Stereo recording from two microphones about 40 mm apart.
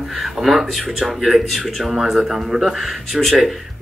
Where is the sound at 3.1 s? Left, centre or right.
Centre.